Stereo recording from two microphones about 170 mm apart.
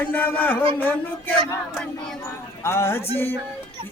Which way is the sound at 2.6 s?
15° left (ahead or behind).